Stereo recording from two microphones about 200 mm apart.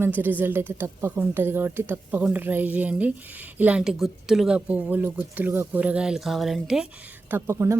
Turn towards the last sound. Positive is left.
turn(degrees=-15)  # may be behind; listen again after turning